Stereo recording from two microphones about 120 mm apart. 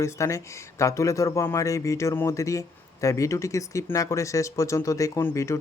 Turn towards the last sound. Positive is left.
turn(degrees=25)  # may be behind; listen again after turning